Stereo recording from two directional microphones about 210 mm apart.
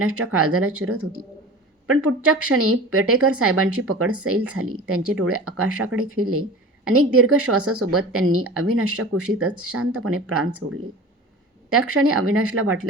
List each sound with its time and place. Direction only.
0.3 s speech: 90° right
11.7 s speech: 90° right